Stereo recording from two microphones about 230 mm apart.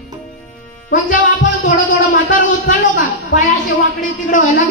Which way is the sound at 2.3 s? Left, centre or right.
Left.